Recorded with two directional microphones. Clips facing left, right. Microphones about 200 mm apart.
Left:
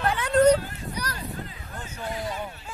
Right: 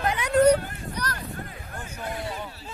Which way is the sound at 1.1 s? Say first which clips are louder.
Even; 55° right (ahead or behind).